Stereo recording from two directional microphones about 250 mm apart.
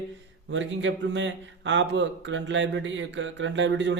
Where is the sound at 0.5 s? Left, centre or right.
Right.